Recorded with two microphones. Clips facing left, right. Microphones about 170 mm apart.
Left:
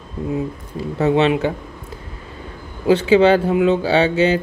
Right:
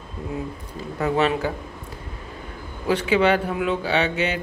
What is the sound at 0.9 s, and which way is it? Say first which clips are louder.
Speech: left 5 dB; 25° left (ahead or behind).